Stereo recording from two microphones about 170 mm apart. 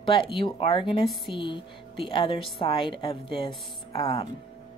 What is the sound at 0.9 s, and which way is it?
Speech, centre (ahead or behind).